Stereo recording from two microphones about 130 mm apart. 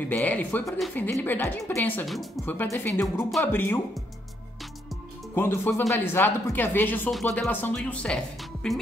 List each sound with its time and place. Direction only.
0.1 s speech: 15° left (ahead or behind)
2.0 s speech: centre (ahead or behind)
2.4 s speech: 15° left (ahead or behind)
5.3 s speech: 15° left (ahead or behind)